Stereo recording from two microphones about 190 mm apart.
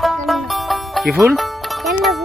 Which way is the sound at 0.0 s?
Centre (ahead or behind).